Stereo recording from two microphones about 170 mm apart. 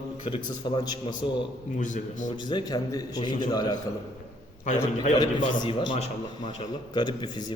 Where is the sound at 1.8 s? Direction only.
45° left (ahead or behind).